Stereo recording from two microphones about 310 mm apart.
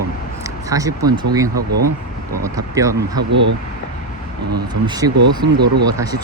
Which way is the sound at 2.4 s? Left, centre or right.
Centre.